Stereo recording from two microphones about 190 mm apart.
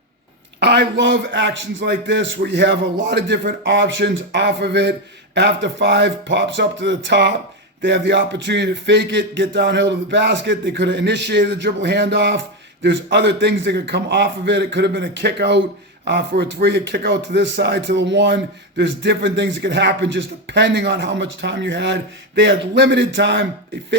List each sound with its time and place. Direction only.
0.6 s a man's voice: 65° right (ahead or behind)